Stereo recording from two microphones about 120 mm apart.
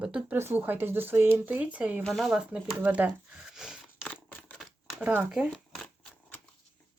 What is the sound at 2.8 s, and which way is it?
Crumpling, 15° right (ahead or behind).